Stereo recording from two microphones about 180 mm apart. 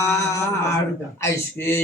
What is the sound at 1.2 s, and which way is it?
Speech, 10° left (ahead or behind).